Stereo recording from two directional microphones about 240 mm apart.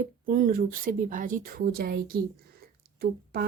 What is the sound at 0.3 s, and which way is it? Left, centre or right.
A woman's voice, right.